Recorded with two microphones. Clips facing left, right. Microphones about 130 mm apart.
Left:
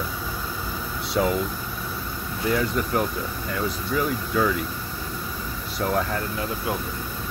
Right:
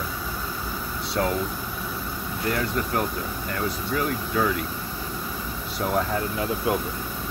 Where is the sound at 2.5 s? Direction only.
Centre (ahead or behind).